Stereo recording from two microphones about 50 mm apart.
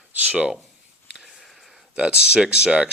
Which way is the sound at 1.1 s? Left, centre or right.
Centre.